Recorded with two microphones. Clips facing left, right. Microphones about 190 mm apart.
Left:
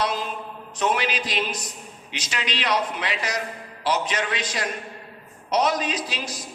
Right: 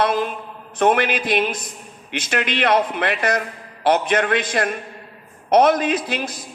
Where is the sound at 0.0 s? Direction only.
55° right (ahead or behind).